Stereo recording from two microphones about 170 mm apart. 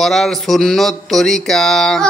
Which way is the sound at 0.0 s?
Centre (ahead or behind).